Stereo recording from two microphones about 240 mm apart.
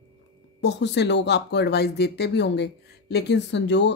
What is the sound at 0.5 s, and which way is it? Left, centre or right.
Speech, left.